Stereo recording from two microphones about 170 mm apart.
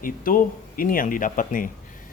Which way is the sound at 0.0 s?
55° left (ahead or behind).